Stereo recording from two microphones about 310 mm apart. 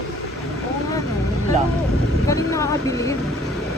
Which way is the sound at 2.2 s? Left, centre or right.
Centre.